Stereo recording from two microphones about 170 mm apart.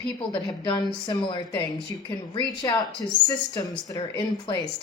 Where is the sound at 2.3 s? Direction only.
20° left (ahead or behind).